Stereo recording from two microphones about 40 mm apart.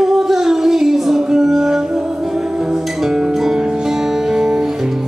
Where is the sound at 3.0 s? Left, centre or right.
Centre.